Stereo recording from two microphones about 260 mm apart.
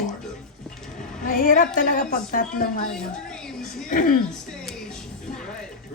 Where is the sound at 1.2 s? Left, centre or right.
Left.